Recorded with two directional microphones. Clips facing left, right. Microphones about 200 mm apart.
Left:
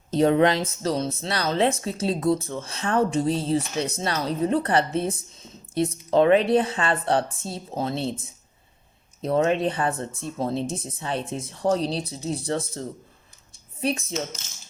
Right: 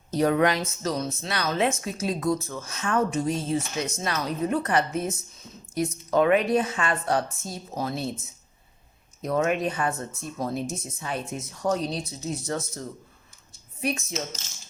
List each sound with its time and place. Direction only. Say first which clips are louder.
0.1 s a woman's voice: left 3 dB; 25° left (ahead or behind)
9.2 s speech: left 3 dB; 30° left (ahead or behind)
13.8 s speech: left 3 dB; 30° left (ahead or behind)